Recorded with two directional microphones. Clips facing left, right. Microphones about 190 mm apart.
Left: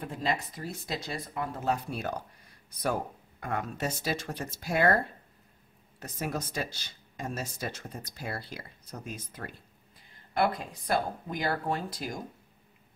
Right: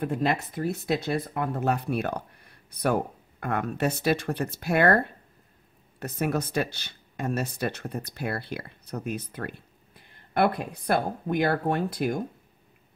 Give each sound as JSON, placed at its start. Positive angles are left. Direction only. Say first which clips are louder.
{"t": 0.0, "sound": "speech", "louder": "right 6 dB", "side_deg": -60}